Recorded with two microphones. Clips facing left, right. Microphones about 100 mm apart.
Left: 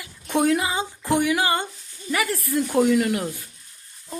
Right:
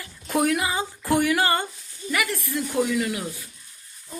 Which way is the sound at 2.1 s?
35° left (ahead or behind).